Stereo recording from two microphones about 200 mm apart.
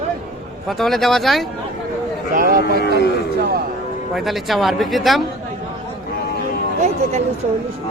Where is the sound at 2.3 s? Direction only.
45° right (ahead or behind).